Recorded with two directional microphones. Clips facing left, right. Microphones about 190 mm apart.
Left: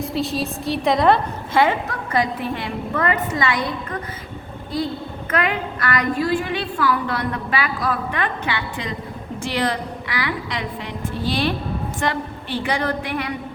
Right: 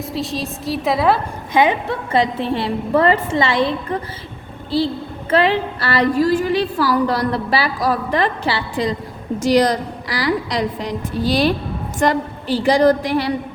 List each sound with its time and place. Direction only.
0.0 s a woman's voice: centre (ahead or behind)
1.5 s a woman's voice: 15° right (ahead or behind)
5.3 s a woman's voice: 30° right (ahead or behind)